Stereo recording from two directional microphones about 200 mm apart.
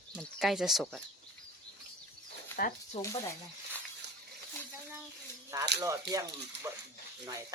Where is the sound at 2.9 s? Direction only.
15° left (ahead or behind).